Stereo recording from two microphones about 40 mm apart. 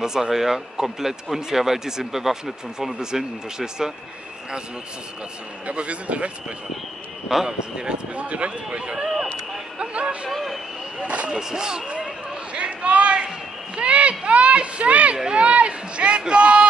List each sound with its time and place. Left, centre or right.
0.0 s speech: centre
5.7 s a man's voice: right
7.4 s speech: centre
8.1 s a man's voice: right
9.8 s music: right
10.3 s vehicle: centre
11.2 s speech: centre
12.5 s a sound: right
15.3 s speech: right